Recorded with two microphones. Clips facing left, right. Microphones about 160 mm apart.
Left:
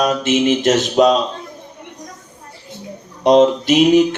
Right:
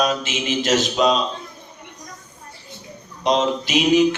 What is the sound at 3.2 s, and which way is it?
Mantra, 55° left (ahead or behind).